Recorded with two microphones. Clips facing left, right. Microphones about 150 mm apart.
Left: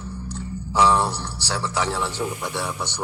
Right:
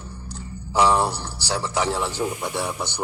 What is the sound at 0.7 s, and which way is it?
A man's voice, 25° right (ahead or behind).